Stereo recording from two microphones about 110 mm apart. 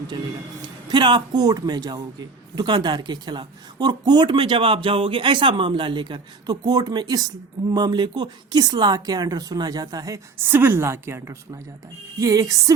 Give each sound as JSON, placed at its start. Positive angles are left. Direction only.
{"t": 0.9, "sound": "speech", "side_deg": -40}
{"t": 10.4, "sound": "a woman's voice", "side_deg": -20}